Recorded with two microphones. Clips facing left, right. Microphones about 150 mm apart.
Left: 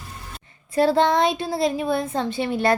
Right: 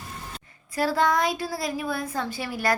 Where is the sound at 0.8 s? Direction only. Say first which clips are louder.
Left 5 dB; 25° left (ahead or behind).